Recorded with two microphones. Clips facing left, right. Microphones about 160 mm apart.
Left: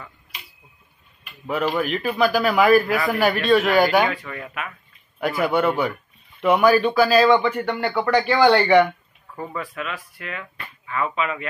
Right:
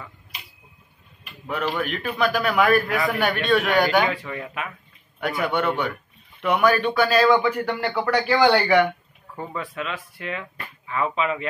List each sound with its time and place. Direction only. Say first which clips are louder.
1.2 s a man's voice: left 3 dB; 5° left (ahead or behind)
4.1 s speech: right 1 dB; 30° right (ahead or behind)
5.2 s a man's voice: left 3 dB; centre (ahead or behind)
9.4 s speech: even; 25° right (ahead or behind)